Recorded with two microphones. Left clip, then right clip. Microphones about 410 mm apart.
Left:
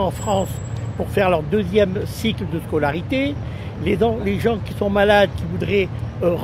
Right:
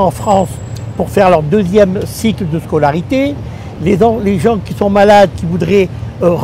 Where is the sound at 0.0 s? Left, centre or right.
Right.